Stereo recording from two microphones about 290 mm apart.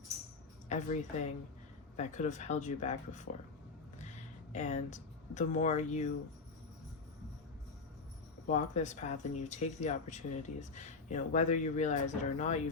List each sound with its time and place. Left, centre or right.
0.7 s a woman's voice: left
2.0 s speech: left
4.5 s speech: left
8.4 s speech: left